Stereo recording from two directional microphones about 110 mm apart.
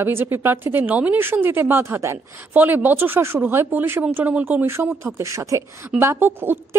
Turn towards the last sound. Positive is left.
turn(degrees=-20)  # may be behind; listen again after turning